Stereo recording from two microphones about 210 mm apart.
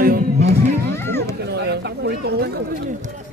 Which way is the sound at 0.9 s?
10° left (ahead or behind).